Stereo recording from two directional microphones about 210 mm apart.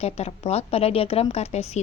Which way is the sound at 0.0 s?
30° left (ahead or behind).